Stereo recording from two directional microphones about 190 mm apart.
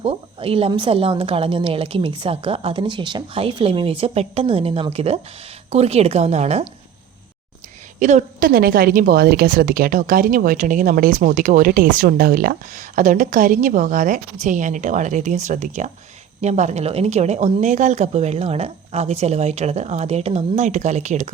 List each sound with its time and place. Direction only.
0.0 s a woman's voice: 30° right (ahead or behind)
7.9 s a woman's voice: 40° right (ahead or behind)